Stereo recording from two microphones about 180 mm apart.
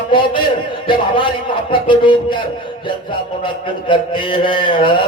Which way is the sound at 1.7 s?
25° left (ahead or behind).